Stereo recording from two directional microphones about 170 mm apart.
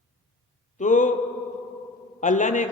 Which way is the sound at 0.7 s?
45° left (ahead or behind).